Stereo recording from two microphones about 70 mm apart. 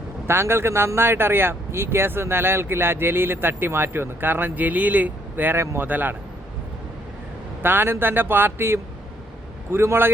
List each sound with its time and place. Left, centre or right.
0.3 s speech: right
5.5 s a man's voice: right
7.6 s a man's voice: right